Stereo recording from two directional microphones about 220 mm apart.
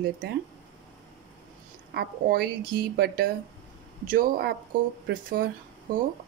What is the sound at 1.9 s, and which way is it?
Speech, 45° right (ahead or behind).